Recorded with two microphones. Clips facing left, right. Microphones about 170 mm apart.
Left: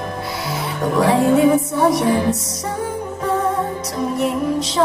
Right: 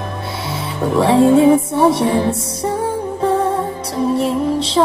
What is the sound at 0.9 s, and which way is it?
Music, 25° right (ahead or behind).